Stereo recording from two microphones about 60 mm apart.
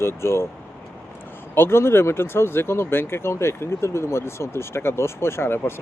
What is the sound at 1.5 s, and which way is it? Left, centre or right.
Speech, left.